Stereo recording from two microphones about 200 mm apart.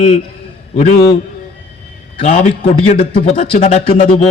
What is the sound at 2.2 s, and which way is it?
A man's voice, 30° left (ahead or behind).